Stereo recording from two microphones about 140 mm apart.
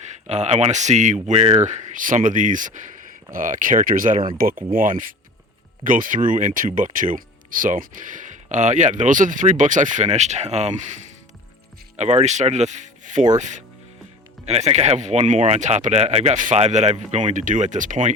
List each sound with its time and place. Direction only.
0.3 s speech: 55° right (ahead or behind)
11.9 s speech: 55° right (ahead or behind)